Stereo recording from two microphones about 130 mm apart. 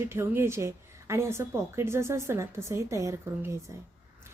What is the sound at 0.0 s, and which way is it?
A woman's voice, 20° right (ahead or behind).